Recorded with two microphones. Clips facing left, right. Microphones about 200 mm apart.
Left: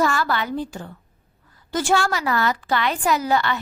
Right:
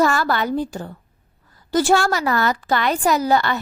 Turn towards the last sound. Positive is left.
turn(degrees=-40)  # may be behind; listen again after turning